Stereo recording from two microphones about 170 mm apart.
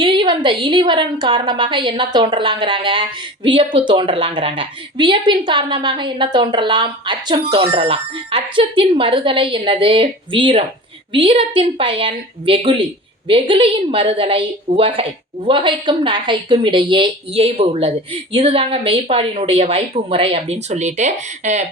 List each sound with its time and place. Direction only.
0.0 s a woman's voice: 30° right (ahead or behind)